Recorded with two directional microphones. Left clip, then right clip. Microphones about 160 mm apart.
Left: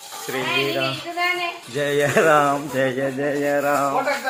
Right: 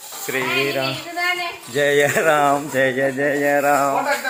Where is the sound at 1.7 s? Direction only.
15° right (ahead or behind).